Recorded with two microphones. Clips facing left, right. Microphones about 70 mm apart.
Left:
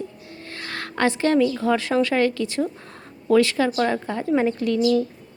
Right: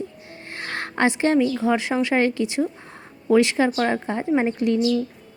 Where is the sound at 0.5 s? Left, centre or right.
Right.